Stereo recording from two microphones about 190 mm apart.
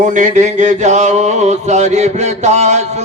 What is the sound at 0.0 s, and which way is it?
Mantra, 40° right (ahead or behind).